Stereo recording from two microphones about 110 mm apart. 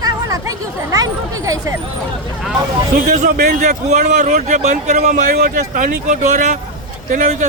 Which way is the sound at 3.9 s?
90° right.